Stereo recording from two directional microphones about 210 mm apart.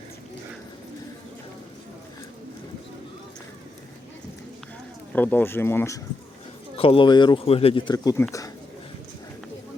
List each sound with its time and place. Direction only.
5.1 s speech: 10° left (ahead or behind)
6.7 s speech: 25° left (ahead or behind)